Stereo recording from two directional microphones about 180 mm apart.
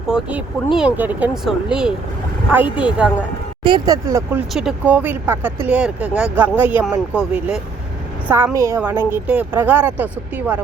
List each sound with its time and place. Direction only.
0.1 s a woman's voice: 10° right (ahead or behind)
3.6 s speech: 25° right (ahead or behind)
4.5 s a woman's voice: 5° right (ahead or behind)